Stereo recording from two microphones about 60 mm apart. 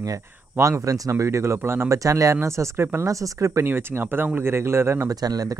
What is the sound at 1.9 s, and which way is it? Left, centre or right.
Speech, right.